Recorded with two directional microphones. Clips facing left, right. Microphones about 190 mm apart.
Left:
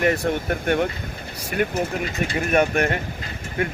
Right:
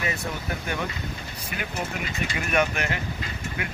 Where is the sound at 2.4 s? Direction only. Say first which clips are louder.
Left 6 dB; 40° left (ahead or behind).